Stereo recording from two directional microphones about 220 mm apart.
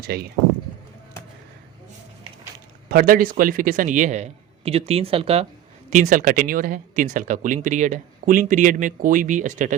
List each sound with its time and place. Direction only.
0.0 s speech: 45° right (ahead or behind)
2.9 s speech: 40° right (ahead or behind)
5.9 s speech: 35° right (ahead or behind)